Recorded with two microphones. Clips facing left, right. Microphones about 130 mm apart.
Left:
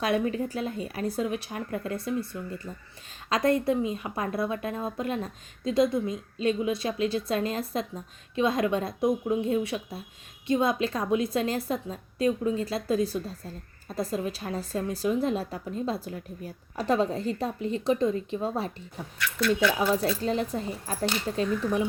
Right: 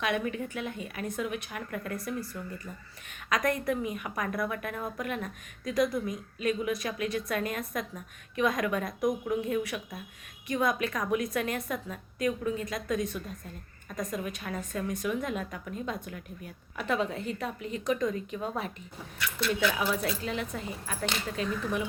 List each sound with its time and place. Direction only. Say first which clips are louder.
0.0 s a woman's voice: left 4 dB; 35° left (ahead or behind)